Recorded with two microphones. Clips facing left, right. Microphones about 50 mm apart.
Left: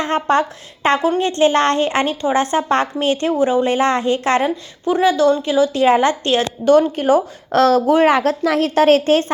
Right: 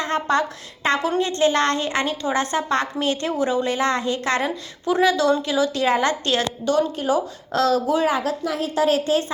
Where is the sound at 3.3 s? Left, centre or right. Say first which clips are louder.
Left 6 dB; centre.